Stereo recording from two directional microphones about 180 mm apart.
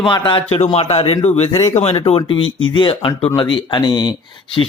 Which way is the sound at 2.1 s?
30° left (ahead or behind).